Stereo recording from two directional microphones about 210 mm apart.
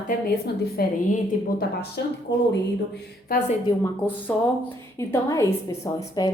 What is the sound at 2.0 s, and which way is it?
Speech, 55° left (ahead or behind).